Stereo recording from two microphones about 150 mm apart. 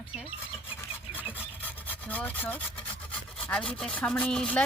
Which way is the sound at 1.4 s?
10° left (ahead or behind).